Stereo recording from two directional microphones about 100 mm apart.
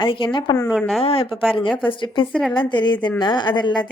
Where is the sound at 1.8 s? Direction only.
55° left (ahead or behind).